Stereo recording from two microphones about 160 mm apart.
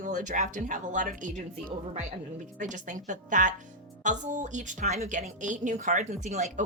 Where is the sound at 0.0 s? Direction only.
50° right (ahead or behind).